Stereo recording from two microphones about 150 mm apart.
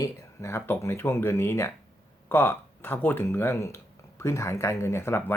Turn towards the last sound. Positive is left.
turn(degrees=15)  # may be behind; listen again after turning